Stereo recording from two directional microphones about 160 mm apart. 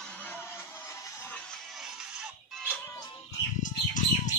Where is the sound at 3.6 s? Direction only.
55° left (ahead or behind).